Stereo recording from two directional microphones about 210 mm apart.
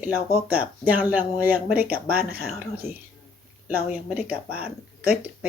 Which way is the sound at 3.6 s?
5° right (ahead or behind).